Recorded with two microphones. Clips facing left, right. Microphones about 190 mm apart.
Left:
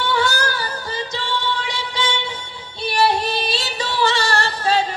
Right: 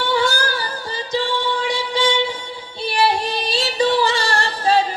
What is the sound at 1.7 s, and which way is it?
Music, 35° right (ahead or behind).